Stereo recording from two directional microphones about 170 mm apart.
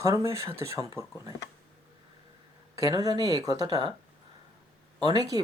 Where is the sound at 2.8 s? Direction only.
20° right (ahead or behind).